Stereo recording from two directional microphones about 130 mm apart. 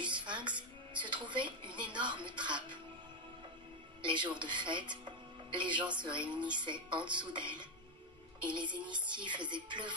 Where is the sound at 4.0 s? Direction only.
40° right (ahead or behind).